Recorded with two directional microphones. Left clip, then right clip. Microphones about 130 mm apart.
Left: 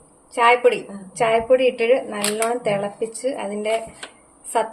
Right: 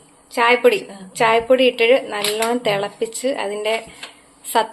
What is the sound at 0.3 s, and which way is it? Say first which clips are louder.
A woman's voice: right 1 dB; 15° right (ahead or behind).